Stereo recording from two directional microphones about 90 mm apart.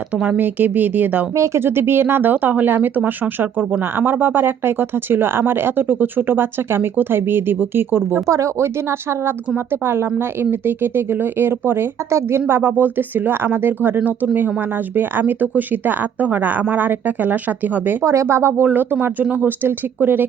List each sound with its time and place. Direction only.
0.2 s speech: 15° right (ahead or behind)
10.4 s speech: 25° right (ahead or behind)
18.0 s speech: 35° right (ahead or behind)